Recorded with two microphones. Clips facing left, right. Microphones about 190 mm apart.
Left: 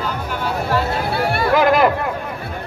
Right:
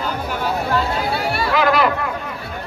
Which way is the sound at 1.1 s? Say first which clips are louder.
Left 5 dB; 55° left (ahead or behind).